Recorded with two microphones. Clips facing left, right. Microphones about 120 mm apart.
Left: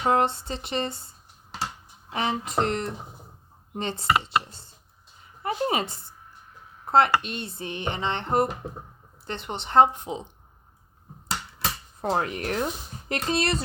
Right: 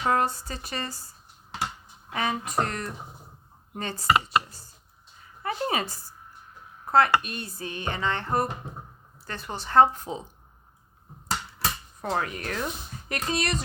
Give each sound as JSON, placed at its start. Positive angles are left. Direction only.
{"t": 0.0, "sound": "speech", "side_deg": 25}
{"t": 12.0, "sound": "speech", "side_deg": 30}